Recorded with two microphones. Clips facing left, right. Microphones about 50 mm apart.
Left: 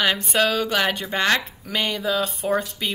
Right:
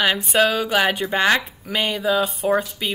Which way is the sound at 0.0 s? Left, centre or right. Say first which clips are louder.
Right 2 dB; centre.